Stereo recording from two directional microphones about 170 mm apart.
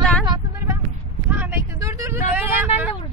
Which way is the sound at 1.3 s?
10° right (ahead or behind).